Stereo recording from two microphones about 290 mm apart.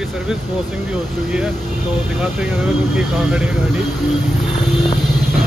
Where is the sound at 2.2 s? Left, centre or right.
Centre.